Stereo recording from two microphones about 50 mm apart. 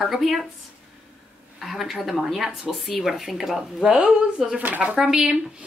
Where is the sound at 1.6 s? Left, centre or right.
Centre.